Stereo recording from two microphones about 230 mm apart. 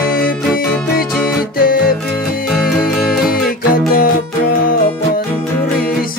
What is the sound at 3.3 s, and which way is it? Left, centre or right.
Music, left.